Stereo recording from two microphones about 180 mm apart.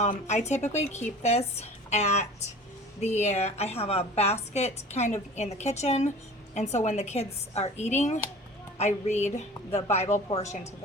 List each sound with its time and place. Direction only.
0.0 s a woman's voice: 40° left (ahead or behind)